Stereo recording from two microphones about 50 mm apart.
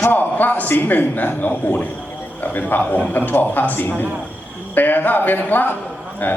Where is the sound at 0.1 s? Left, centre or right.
Left.